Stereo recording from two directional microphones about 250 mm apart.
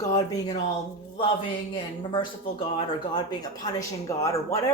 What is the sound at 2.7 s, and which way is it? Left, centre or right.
Speech, centre.